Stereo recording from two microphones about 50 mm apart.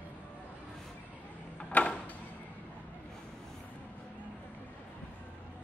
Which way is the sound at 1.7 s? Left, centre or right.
Left.